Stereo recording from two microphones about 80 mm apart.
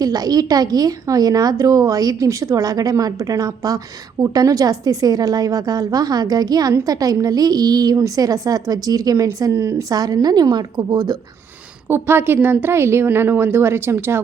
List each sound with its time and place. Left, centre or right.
0.0 s a woman's voice: right
9.9 s a woman's voice: right
11.9 s a woman's voice: right